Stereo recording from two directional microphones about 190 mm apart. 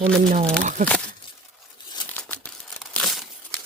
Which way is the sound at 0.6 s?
40° right (ahead or behind).